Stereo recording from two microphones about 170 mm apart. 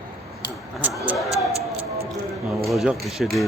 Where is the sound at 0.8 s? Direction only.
10° right (ahead or behind).